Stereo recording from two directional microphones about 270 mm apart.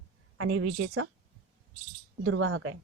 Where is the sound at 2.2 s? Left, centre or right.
Right.